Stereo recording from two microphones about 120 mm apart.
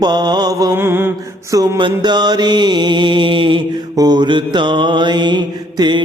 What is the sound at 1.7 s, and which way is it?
Mantra, 40° right (ahead or behind).